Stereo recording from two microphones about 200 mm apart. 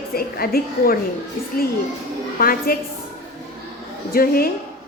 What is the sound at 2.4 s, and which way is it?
Speech, 45° left (ahead or behind).